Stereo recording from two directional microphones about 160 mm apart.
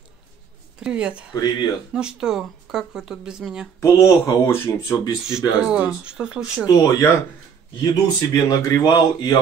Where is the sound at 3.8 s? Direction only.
15° left (ahead or behind).